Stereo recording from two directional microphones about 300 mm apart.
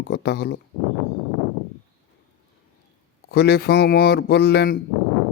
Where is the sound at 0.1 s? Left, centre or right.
Left.